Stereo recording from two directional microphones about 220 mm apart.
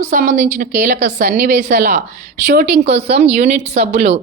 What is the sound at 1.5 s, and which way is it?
Speech, 50° right (ahead or behind).